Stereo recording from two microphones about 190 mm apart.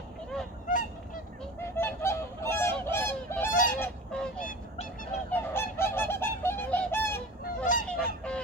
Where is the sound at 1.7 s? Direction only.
15° left (ahead or behind).